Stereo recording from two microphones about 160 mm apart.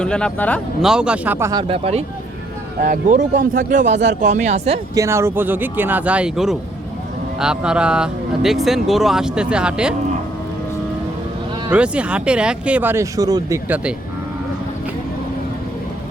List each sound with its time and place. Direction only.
0.0 s speech: 5° left (ahead or behind)
0.8 s speech: 5° right (ahead or behind)
1.6 s speech: 35° right (ahead or behind)
2.8 s speech: 55° right (ahead or behind)
4.9 s speech: 15° right (ahead or behind)
11.7 s speech: 10° right (ahead or behind)
13.7 s speech: 10° right (ahead or behind)